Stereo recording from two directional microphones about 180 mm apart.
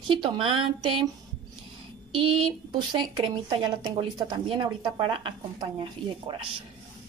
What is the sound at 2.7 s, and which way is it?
A woman's voice, 25° right (ahead or behind).